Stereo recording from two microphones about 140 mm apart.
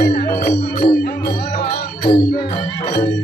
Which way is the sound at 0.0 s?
90° left.